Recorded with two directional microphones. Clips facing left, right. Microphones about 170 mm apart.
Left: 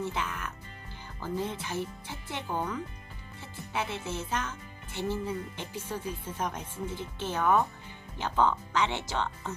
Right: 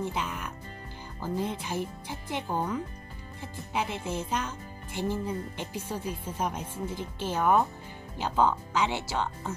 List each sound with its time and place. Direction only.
0.0 s speech: 15° right (ahead or behind)